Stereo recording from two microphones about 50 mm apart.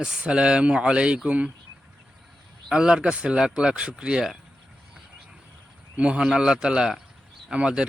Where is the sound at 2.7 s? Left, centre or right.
Centre.